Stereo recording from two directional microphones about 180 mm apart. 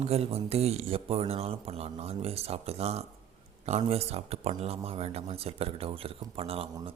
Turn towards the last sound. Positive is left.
turn(degrees=-30)  # may be behind; listen again after turning